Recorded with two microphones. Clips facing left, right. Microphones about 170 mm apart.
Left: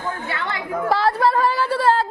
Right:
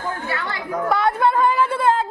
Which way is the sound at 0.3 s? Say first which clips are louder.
Even; 25° left (ahead or behind).